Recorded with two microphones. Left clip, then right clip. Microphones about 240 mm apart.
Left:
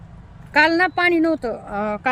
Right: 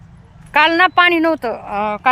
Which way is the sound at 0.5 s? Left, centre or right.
Centre.